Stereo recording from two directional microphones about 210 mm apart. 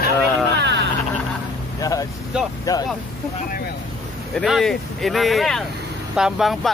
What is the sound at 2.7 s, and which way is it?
Speech, 15° left (ahead or behind).